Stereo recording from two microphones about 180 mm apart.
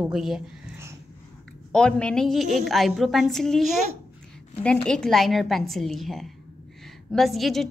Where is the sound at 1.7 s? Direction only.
5° left (ahead or behind).